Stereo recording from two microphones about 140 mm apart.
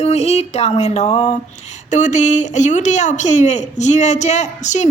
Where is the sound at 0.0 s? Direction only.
50° left (ahead or behind).